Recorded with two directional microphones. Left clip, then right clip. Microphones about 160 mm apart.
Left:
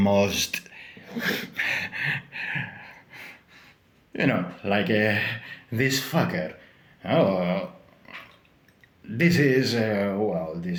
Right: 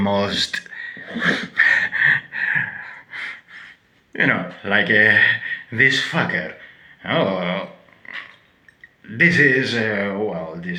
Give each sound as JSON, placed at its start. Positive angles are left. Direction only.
{"t": 0.0, "sound": "a sound", "side_deg": 45}
{"t": 4.1, "sound": "speech", "side_deg": 35}
{"t": 9.1, "sound": "speech", "side_deg": 40}